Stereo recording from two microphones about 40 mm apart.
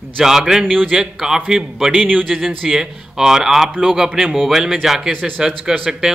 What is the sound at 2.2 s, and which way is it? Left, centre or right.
Speech, centre.